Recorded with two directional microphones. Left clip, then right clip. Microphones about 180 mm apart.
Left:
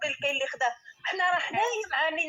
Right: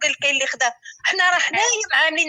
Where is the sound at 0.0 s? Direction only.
30° right (ahead or behind).